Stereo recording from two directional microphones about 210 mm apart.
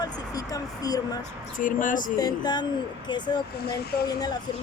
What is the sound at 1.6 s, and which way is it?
Speech, 40° left (ahead or behind).